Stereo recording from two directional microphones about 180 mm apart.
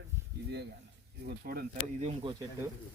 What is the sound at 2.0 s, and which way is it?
Speech, 35° right (ahead or behind).